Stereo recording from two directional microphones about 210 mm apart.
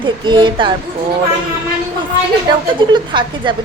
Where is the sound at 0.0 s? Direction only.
20° right (ahead or behind).